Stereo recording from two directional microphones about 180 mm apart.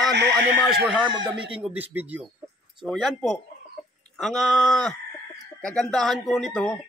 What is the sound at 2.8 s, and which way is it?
Speech, centre (ahead or behind).